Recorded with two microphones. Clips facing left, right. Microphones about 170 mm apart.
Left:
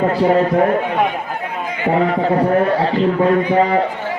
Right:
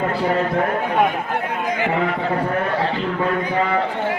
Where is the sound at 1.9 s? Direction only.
40° left (ahead or behind).